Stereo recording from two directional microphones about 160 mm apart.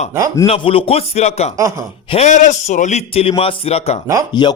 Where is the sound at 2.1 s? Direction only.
45° left (ahead or behind).